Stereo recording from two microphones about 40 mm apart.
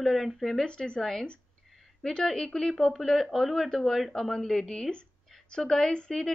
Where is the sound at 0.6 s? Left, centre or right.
Left.